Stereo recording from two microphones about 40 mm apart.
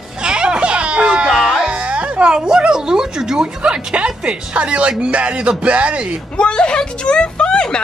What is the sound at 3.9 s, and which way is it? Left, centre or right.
Speech, right.